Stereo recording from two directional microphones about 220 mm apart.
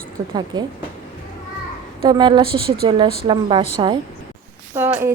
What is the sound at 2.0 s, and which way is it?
Speech, 20° right (ahead or behind).